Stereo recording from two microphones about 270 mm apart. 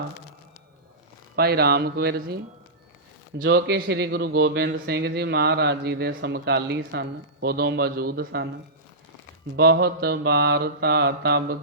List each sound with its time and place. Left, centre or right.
1.4 s a man's voice: right
3.3 s a man's voice: right
9.6 s a man's voice: right